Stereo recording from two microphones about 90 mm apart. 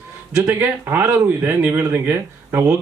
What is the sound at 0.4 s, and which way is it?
Speech, 20° right (ahead or behind).